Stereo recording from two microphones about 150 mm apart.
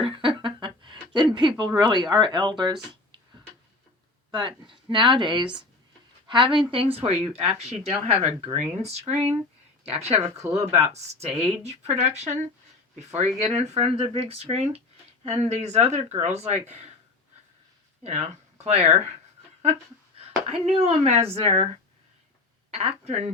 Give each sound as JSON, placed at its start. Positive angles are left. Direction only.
{"t": 0.0, "sound": "a sound", "side_deg": -35}
{"t": 4.3, "sound": "speech", "side_deg": -30}
{"t": 18.6, "sound": "speech", "side_deg": -45}
{"t": 20.1, "sound": "speech", "side_deg": -40}
{"t": 22.7, "sound": "speech", "side_deg": -45}